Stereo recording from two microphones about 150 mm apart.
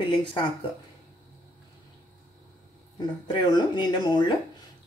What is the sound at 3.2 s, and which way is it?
Speech, 30° left (ahead or behind).